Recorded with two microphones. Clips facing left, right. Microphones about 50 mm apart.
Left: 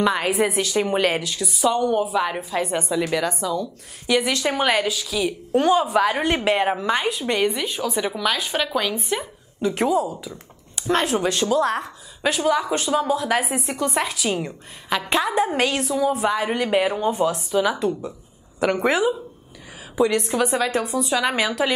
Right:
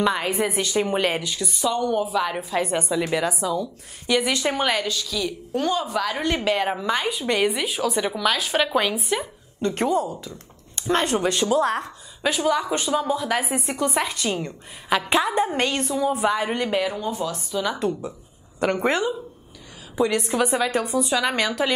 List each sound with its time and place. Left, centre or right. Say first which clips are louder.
0.0 s speech: left 2 dB; centre
1.7 s a woman's voice: left 2 dB; centre
6.7 s a woman's voice: left 2 dB; centre
7.1 s speech: left 1 dB; centre
9.1 s speech: even; centre
14.9 s speech: right 1 dB; centre
16.8 s a woman's voice: left 5 dB; left
17.7 s speech: left 1 dB; centre